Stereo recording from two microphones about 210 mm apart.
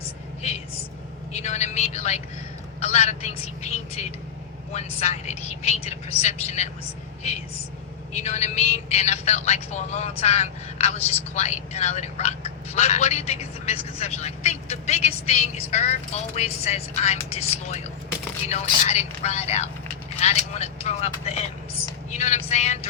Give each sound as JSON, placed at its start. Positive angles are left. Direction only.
{"t": 1.3, "sound": "a man's voice", "side_deg": 30}
{"t": 8.1, "sound": "speech", "side_deg": 30}
{"t": 18.9, "sound": "speech", "side_deg": 30}